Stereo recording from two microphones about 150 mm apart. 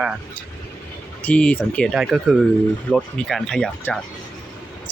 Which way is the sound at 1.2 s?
10° left (ahead or behind).